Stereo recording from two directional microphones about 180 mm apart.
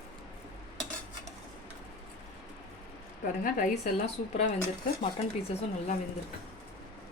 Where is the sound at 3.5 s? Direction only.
40° left (ahead or behind).